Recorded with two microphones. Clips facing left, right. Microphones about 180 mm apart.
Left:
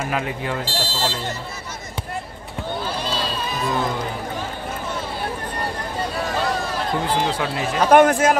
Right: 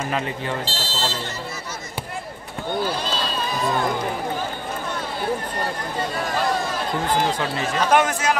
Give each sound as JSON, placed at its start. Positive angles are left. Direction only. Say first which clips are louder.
{"t": 0.0, "sound": "speech", "louder": "left 1 dB", "side_deg": 5}
{"t": 7.3, "sound": "speech", "louder": "left 1 dB", "side_deg": 5}
{"t": 7.9, "sound": "speech", "louder": "left 7 dB", "side_deg": 55}